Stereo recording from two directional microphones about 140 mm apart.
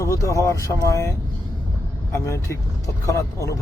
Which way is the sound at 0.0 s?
20° left (ahead or behind).